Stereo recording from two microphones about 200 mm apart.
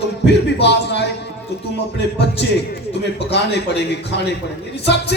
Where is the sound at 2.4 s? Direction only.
60° left (ahead or behind).